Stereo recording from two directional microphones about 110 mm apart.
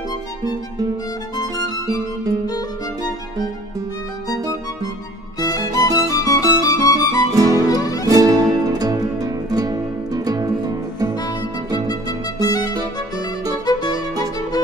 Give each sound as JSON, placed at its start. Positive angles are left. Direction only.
{"t": 1.3, "sound": "music", "side_deg": 35}
{"t": 5.4, "sound": "music", "side_deg": 35}
{"t": 8.1, "sound": "music", "side_deg": -30}
{"t": 11.9, "sound": "music", "side_deg": 35}